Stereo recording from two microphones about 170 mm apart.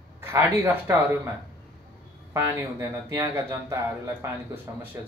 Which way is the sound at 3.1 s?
15° right (ahead or behind).